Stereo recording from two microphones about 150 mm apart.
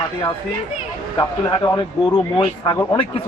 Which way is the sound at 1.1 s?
20° left (ahead or behind).